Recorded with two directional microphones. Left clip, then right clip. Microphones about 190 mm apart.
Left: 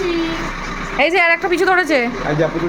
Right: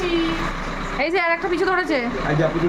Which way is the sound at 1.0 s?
10° left (ahead or behind).